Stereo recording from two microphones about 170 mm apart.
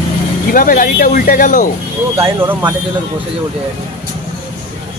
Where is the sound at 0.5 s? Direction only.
55° left (ahead or behind).